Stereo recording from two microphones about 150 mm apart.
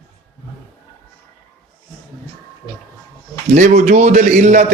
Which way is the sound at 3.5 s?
50° right (ahead or behind).